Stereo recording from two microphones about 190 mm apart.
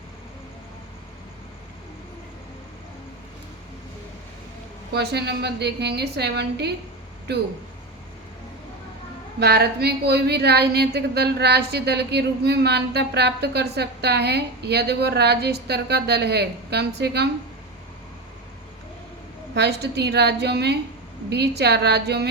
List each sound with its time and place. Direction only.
4.9 s a woman's voice: 60° right (ahead or behind)
9.4 s a woman's voice: 55° right (ahead or behind)
19.5 s a woman's voice: 60° right (ahead or behind)